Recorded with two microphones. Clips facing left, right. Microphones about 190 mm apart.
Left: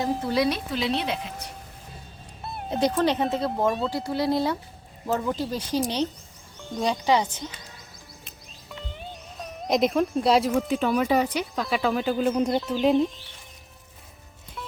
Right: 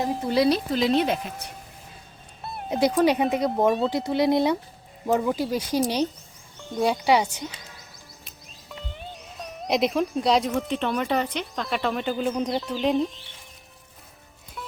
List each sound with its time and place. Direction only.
0.3 s speech: 30° right (ahead or behind); by 1.3 s 45° right (ahead or behind)
2.4 s cat: centre (ahead or behind)
2.6 s speech: 10° right (ahead or behind)
8.7 s speech: centre (ahead or behind)